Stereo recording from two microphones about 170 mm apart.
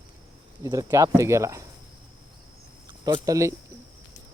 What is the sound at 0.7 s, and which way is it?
Speech, 15° right (ahead or behind).